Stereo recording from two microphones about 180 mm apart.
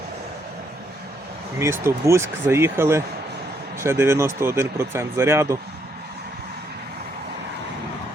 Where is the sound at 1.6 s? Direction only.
15° right (ahead or behind).